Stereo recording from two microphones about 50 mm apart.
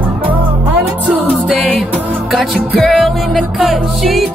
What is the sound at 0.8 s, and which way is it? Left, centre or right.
Music, right.